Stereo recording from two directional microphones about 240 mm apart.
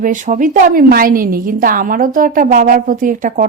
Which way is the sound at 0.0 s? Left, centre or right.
Right.